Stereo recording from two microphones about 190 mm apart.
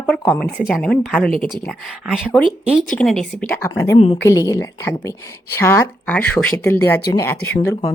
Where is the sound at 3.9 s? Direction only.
30° left (ahead or behind).